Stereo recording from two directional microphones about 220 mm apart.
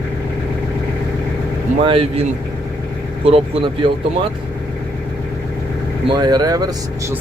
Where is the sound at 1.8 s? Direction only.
25° right (ahead or behind).